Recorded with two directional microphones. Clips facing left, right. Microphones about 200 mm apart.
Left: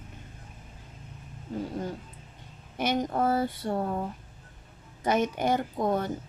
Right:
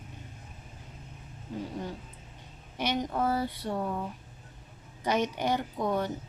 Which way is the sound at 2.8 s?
50° left (ahead or behind).